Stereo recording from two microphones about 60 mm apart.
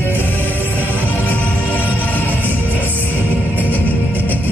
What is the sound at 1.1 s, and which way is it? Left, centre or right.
Music, left.